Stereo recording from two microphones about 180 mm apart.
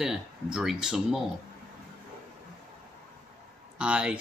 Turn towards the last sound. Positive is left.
turn(degrees=-5)  # may be behind; listen again after turning